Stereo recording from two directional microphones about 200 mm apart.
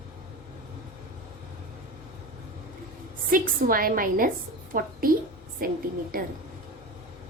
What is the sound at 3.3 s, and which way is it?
A woman's voice, 45° right (ahead or behind).